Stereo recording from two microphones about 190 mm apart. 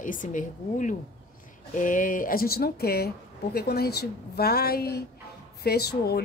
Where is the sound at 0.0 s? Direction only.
45° left (ahead or behind).